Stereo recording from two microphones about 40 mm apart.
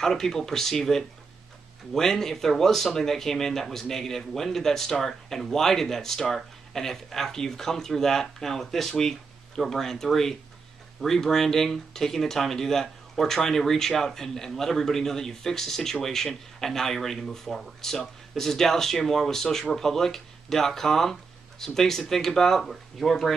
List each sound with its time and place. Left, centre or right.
0.0 s speech: centre